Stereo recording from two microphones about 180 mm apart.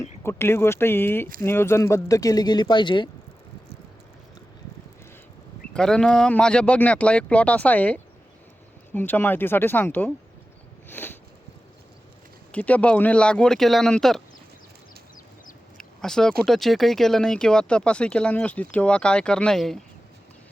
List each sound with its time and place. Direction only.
0.2 s speech: 15° left (ahead or behind)
5.7 s speech: 5° left (ahead or behind)
10.9 s a sound: 10° left (ahead or behind)
12.5 s speech: 10° left (ahead or behind)
15.8 s a sound: 5° left (ahead or behind)
16.4 s speech: centre (ahead or behind)